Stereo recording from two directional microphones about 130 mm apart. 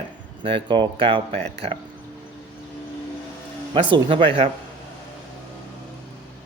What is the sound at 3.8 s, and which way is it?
Speech, 40° right (ahead or behind).